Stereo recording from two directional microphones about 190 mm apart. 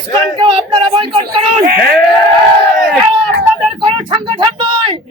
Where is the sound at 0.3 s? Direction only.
25° right (ahead or behind).